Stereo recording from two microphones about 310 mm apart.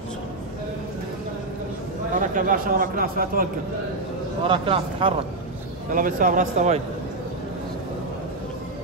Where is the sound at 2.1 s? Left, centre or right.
Right.